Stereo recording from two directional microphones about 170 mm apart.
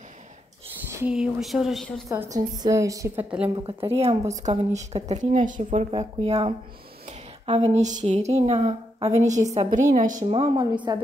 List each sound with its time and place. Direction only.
0.9 s speech: 5° right (ahead or behind)
2.0 s a woman's voice: 20° right (ahead or behind)
3.4 s a woman's voice: 30° right (ahead or behind)
4.3 s a woman's voice: 45° right (ahead or behind)
10.3 s a woman's voice: 35° right (ahead or behind)